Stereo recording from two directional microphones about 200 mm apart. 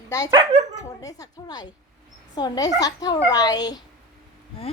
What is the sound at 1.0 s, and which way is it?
Speech, 20° left (ahead or behind).